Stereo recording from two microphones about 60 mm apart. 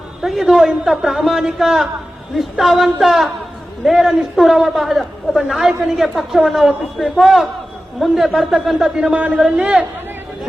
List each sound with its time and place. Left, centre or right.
0.2 s a man's voice: centre
9.0 s a man's voice: centre